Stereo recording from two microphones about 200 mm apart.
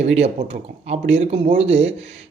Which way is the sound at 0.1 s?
30° right (ahead or behind).